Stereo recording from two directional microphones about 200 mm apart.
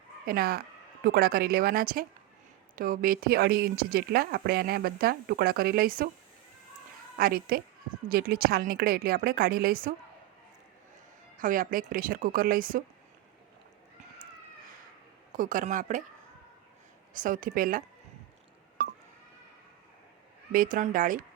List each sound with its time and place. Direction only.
0.3 s speech: 50° right (ahead or behind)
7.2 s speech: 45° right (ahead or behind)
11.3 s a woman's voice: 40° right (ahead or behind)
15.3 s speech: 40° right (ahead or behind)
17.2 s speech: 45° right (ahead or behind)
20.5 s speech: 45° right (ahead or behind)